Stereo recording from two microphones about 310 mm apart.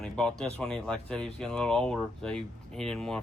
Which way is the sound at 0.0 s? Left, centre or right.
Centre.